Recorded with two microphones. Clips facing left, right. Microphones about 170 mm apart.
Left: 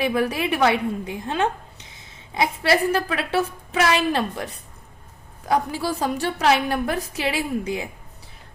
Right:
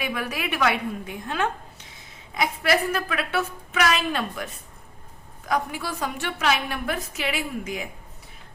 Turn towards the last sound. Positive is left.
turn(degrees=30)  # may be behind; listen again after turning